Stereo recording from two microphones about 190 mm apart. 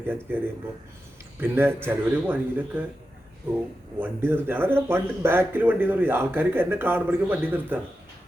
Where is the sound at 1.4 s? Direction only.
10° right (ahead or behind).